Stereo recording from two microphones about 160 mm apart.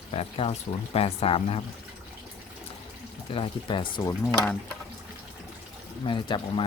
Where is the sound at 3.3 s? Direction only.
35° left (ahead or behind).